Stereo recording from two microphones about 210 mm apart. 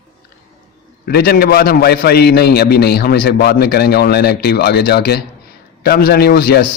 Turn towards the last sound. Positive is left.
turn(degrees=50)  # may be behind; listen again after turning